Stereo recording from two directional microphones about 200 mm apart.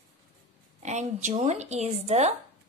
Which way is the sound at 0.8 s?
35° right (ahead or behind).